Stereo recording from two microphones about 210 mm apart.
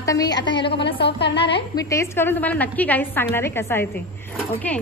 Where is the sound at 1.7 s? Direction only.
15° left (ahead or behind).